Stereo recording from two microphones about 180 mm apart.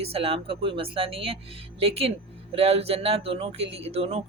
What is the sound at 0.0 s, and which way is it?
Speech, 30° right (ahead or behind).